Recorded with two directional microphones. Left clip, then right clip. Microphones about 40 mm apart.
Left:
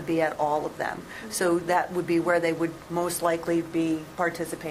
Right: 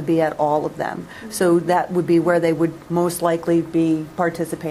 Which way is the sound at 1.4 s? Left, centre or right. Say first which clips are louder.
Right 7 dB; right.